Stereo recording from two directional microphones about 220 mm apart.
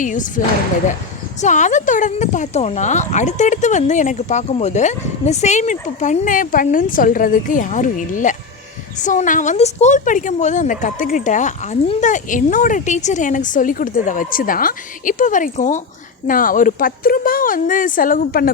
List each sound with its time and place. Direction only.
0.0 s speech: 35° left (ahead or behind)